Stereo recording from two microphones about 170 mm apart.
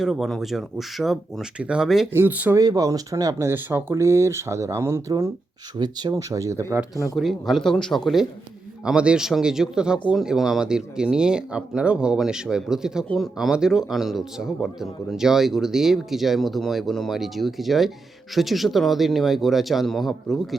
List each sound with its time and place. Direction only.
0.0 s speech: centre (ahead or behind)
2.1 s speech: 10° right (ahead or behind)
6.9 s speech: 20° left (ahead or behind)
7.2 s speech: centre (ahead or behind)